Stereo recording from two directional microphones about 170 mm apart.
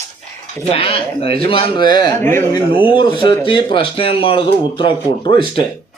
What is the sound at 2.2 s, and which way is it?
Speech, 15° left (ahead or behind).